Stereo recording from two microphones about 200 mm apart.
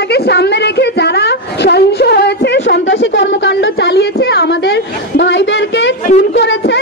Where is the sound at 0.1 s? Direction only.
55° left (ahead or behind).